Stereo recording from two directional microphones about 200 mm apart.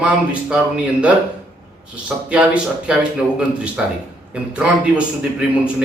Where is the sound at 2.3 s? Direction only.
5° right (ahead or behind).